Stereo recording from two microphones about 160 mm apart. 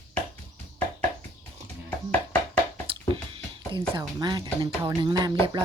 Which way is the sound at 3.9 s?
25° right (ahead or behind).